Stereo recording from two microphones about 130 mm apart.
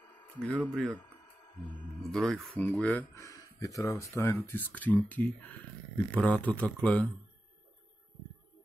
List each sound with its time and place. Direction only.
0.6 s speech: 5° left (ahead or behind)
2.0 s speech: 5° left (ahead or behind)
3.1 s speech: 25° left (ahead or behind)